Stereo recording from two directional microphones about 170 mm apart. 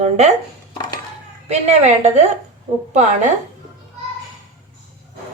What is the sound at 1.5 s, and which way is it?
A woman's voice, 40° right (ahead or behind).